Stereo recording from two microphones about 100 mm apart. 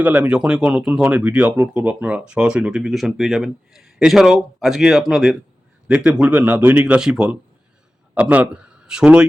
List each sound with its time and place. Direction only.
0.0 s speech: 15° right (ahead or behind)